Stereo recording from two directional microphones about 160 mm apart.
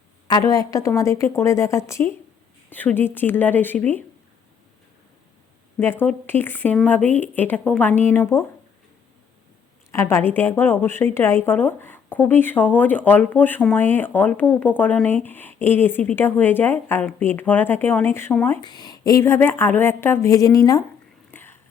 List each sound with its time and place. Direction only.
0.3 s a woman's voice: 20° left (ahead or behind)
5.8 s a woman's voice: 15° left (ahead or behind)
9.9 s a woman's voice: 15° left (ahead or behind)
18.6 s a woman's voice: 25° left (ahead or behind)
21.2 s whispering: 15° left (ahead or behind)